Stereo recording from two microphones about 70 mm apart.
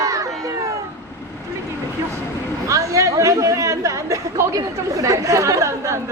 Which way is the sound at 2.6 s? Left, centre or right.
Right.